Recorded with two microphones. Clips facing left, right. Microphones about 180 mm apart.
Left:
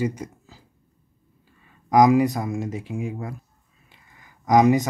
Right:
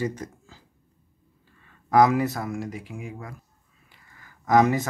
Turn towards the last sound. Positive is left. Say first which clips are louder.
# left 3 dB
turn(degrees=15)  # may be behind; listen again after turning